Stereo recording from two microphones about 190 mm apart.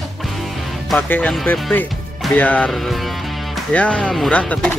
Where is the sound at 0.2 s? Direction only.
Centre (ahead or behind).